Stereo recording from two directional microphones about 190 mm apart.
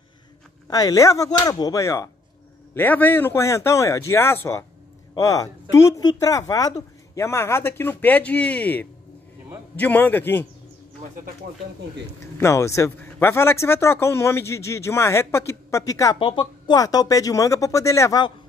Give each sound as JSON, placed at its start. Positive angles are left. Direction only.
{"t": 0.7, "sound": "a man's voice", "side_deg": 20}
{"t": 12.4, "sound": "a man's voice", "side_deg": 15}